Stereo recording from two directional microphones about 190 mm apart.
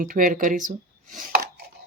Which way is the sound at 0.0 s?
45° right (ahead or behind).